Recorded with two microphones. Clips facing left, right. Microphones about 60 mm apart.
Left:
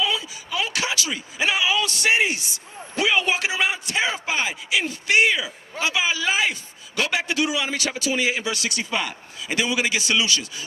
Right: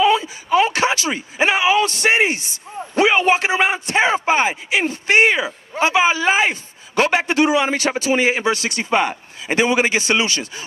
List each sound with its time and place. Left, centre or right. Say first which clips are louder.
0.0 s speech: right 10 dB; right